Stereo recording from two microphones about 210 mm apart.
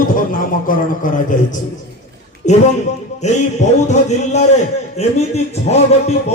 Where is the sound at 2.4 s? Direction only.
35° left (ahead or behind).